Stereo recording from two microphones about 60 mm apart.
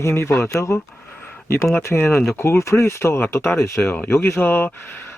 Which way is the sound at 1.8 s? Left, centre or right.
Left.